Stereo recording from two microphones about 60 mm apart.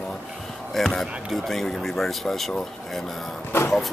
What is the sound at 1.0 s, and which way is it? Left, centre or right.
Speech, centre.